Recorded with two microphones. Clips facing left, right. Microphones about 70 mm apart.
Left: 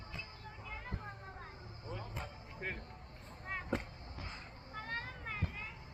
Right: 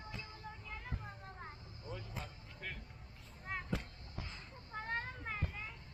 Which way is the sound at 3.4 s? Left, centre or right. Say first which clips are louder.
Even; centre.